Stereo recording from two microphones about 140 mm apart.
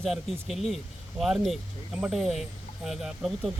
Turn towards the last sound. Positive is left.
turn(degrees=-5)  # may be behind; listen again after turning